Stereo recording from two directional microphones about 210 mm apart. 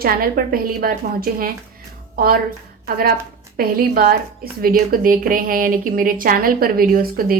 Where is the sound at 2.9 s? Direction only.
45° right (ahead or behind).